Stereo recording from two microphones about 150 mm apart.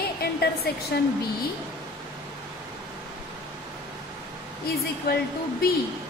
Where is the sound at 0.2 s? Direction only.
90° left.